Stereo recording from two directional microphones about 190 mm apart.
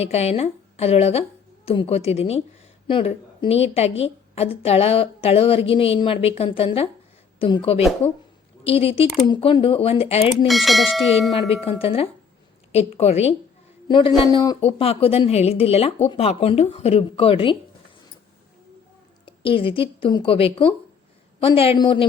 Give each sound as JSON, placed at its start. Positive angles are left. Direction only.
{"t": 0.0, "sound": "a woman's voice", "side_deg": 35}
{"t": 8.0, "sound": "speech", "side_deg": 10}
{"t": 8.6, "sound": "a woman's voice", "side_deg": 30}
{"t": 10.4, "sound": "speech", "side_deg": 0}
{"t": 11.4, "sound": "a woman's voice", "side_deg": 30}
{"t": 19.2, "sound": "a woman's voice", "side_deg": 30}